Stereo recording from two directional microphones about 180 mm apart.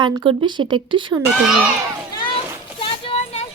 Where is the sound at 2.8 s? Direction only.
30° left (ahead or behind).